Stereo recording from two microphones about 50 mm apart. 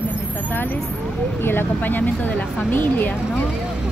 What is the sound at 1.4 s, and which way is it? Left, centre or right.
Speech, left.